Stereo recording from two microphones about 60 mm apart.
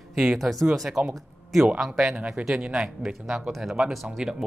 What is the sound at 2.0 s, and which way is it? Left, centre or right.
A man's voice, centre.